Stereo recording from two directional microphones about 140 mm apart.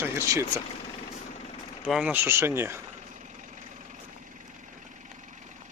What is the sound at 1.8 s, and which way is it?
Speech, 5° right (ahead or behind).